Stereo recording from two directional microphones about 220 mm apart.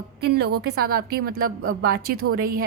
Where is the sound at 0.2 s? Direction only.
45° right (ahead or behind).